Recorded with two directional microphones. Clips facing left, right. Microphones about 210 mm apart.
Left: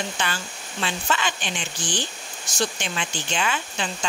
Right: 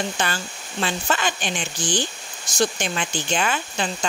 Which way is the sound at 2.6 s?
45° right (ahead or behind).